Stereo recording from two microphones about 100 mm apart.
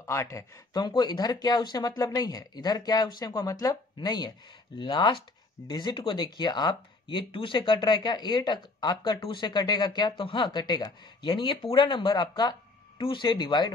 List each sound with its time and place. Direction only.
0.0 s speech: 30° left (ahead or behind)